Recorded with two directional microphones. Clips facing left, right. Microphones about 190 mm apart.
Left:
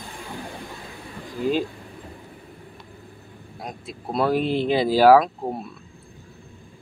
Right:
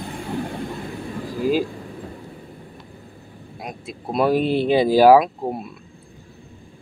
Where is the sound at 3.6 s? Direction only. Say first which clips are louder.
Right 2 dB; 15° right (ahead or behind).